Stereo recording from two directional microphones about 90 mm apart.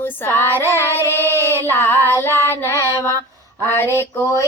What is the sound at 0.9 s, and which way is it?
Child singing, 25° left (ahead or behind).